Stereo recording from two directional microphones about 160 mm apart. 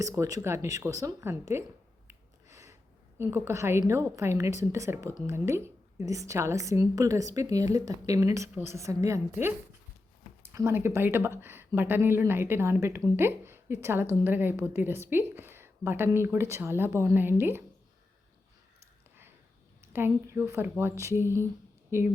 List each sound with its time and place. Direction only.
0.0 s a woman's voice: 20° right (ahead or behind)
2.0 s a sound: 20° right (ahead or behind)
3.2 s a woman's voice: 15° right (ahead or behind)
19.8 s speech: 15° right (ahead or behind)